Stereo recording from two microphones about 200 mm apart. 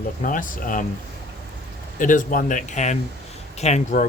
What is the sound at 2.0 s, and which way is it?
Speech, 40° left (ahead or behind).